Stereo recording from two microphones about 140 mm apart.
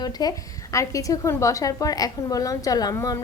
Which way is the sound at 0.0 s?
30° left (ahead or behind).